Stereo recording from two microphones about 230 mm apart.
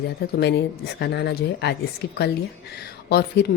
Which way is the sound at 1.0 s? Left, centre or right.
Left.